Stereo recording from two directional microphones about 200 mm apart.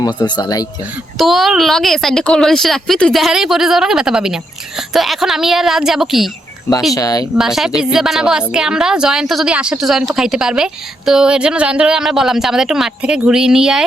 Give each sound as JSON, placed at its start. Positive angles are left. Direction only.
{"t": 0.0, "sound": "speech", "side_deg": 20}
{"t": 1.2, "sound": "a woman's voice", "side_deg": 0}
{"t": 6.9, "sound": "speech", "side_deg": 15}
{"t": 7.3, "sound": "a woman's voice", "side_deg": 0}